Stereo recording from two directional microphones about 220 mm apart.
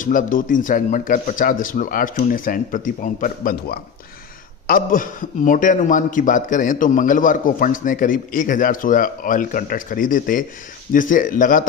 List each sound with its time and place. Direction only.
0.0 s a man's voice: 40° left (ahead or behind)